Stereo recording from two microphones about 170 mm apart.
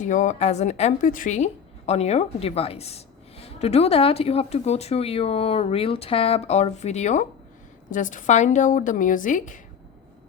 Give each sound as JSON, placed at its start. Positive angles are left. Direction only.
{"t": 0.0, "sound": "a woman's voice", "side_deg": 50}